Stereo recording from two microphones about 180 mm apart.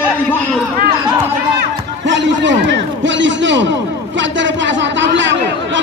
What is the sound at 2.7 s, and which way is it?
A man's voice, 90° right.